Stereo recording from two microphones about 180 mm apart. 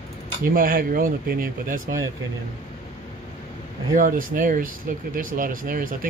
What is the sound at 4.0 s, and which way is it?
Speech, 50° right (ahead or behind).